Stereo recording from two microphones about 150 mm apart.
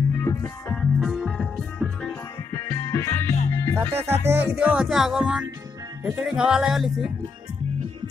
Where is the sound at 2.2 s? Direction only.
20° left (ahead or behind).